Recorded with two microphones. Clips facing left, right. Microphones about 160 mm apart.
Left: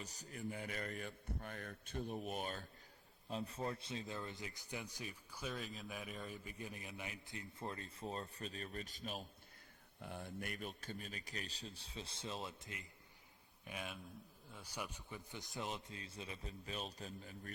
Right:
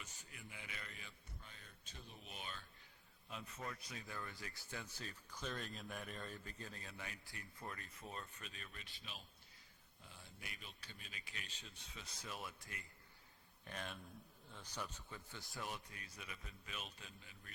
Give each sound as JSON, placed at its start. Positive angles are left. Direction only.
{"t": 0.0, "sound": "a man's voice", "side_deg": 40}
{"t": 3.2, "sound": "a man's voice", "side_deg": 30}
{"t": 10.0, "sound": "a man's voice", "side_deg": 60}
{"t": 13.7, "sound": "a man's voice", "side_deg": 5}